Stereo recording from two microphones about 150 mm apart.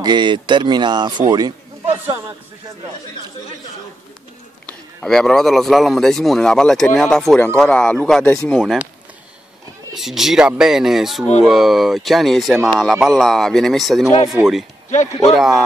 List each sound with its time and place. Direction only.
0.0 s speech: 30° right (ahead or behind)
4.6 s a man's voice: 5° left (ahead or behind)
9.9 s a man's voice: centre (ahead or behind)